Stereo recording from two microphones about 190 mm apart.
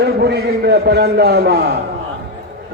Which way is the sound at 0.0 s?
60° right (ahead or behind).